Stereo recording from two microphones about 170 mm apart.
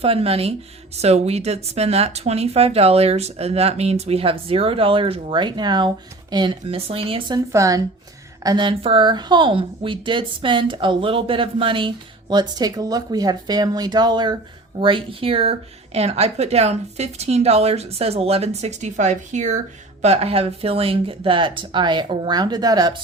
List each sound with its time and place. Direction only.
0.0 s speech: 35° right (ahead or behind)
7.5 s a woman's voice: 20° right (ahead or behind)